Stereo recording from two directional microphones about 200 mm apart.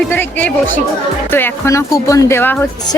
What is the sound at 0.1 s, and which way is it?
Speech, 10° left (ahead or behind).